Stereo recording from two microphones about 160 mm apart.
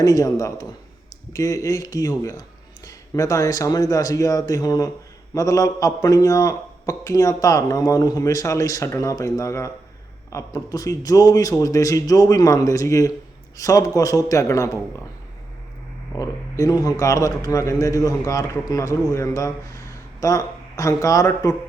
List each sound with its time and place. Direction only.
0.0 s a man's voice: 20° left (ahead or behind)
16.1 s a man's voice: 20° left (ahead or behind)